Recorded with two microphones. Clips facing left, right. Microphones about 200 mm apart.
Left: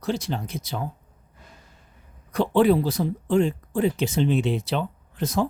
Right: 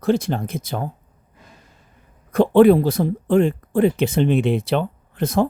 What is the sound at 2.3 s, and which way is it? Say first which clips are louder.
Speech: right 7 dB; 55° right (ahead or behind).